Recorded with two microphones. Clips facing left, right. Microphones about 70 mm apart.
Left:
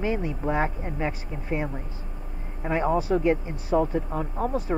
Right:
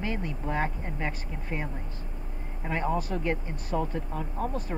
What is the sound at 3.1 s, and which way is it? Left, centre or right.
Speech, left.